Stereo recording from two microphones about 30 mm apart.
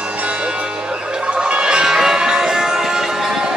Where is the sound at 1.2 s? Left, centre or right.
Right.